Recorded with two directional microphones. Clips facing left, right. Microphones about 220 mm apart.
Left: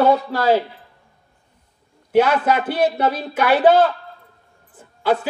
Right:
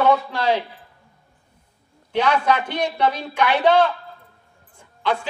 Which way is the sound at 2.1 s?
5° left (ahead or behind).